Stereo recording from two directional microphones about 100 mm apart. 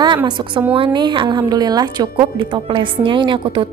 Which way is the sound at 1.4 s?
40° right (ahead or behind).